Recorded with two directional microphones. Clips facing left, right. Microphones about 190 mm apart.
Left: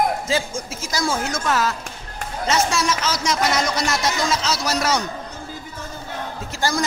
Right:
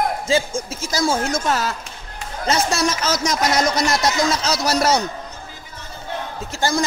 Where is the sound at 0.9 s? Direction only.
30° right (ahead or behind).